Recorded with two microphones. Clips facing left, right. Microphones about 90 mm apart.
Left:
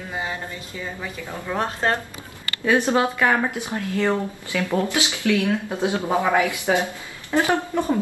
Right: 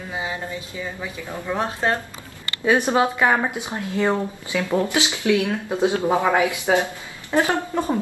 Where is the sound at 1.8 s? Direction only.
5° right (ahead or behind).